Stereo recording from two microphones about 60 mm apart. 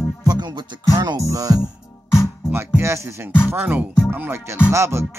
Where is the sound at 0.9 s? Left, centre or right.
Right.